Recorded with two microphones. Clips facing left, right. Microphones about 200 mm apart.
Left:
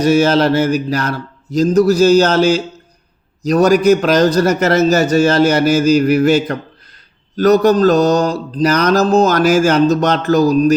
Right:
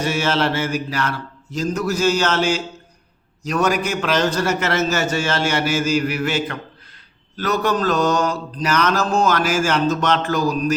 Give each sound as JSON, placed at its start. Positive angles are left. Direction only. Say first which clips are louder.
{"t": 0.0, "sound": "mantra", "louder": "left 9 dB", "side_deg": 40}